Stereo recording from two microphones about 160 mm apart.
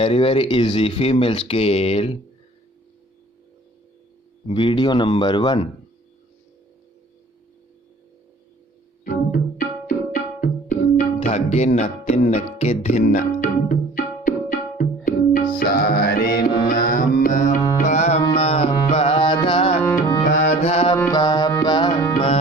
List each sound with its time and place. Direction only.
0.0 s speech: 35° left (ahead or behind)
4.5 s speech: 35° left (ahead or behind)
9.0 s tabla: 60° left (ahead or behind)
11.3 s speech: 40° left (ahead or behind); by 14.3 s 60° left (ahead or behind)
14.8 s tabla: 60° left (ahead or behind)
15.5 s music: 70° left (ahead or behind)
16.6 s music: 55° left (ahead or behind); by 19.8 s 35° left (ahead or behind)
20.2 s music: 45° left (ahead or behind)
21.1 s music: 25° left (ahead or behind)